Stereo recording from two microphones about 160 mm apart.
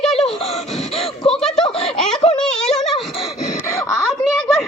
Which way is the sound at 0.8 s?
40° left (ahead or behind).